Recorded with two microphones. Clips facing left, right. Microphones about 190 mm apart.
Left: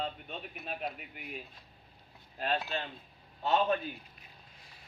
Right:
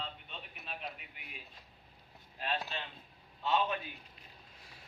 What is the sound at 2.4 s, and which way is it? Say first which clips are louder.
A man's voice: left 5 dB; 45° left (ahead or behind).